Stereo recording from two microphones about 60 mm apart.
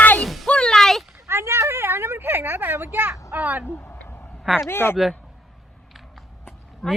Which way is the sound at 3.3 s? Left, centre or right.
Right.